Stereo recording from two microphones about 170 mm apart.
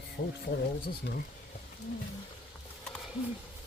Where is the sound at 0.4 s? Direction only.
70° left (ahead or behind).